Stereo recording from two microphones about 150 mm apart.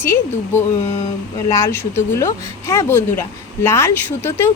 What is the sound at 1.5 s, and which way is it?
Speech, 20° left (ahead or behind).